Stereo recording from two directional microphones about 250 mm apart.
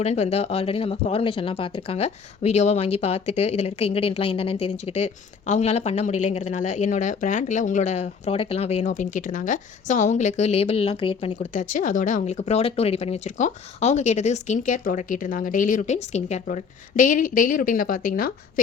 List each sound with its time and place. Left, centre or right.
0.0 s speech: left